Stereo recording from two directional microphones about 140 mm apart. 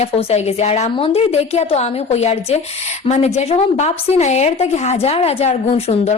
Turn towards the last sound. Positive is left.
turn(degrees=50)  # may be behind; listen again after turning